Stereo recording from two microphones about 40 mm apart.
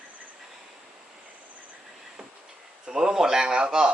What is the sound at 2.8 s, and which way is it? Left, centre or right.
A man's voice, centre.